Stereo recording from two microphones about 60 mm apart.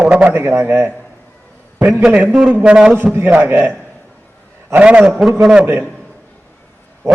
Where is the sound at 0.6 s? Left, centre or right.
Right.